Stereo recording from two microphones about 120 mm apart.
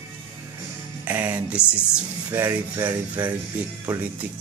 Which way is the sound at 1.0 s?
15° right (ahead or behind).